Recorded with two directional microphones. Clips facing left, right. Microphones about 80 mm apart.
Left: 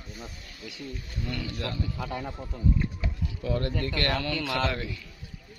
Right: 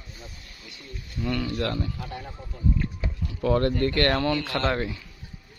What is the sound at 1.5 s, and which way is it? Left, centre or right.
Speech, right.